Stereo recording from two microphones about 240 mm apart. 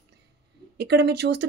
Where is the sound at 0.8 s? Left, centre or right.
Right.